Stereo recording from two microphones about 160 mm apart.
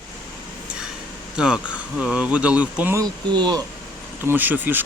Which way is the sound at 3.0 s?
25° right (ahead or behind).